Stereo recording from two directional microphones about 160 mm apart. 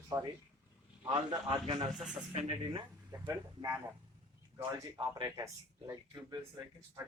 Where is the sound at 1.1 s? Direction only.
30° right (ahead or behind).